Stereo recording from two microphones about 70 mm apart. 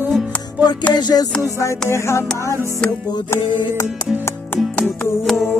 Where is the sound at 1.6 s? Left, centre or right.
Left.